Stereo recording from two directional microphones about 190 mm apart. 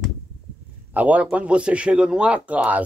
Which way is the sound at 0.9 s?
10° right (ahead or behind).